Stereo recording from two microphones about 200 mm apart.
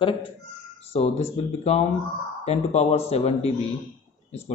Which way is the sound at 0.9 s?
30° left (ahead or behind).